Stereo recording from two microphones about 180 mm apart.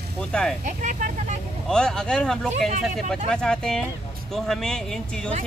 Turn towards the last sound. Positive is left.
turn(degrees=5)  # may be behind; listen again after turning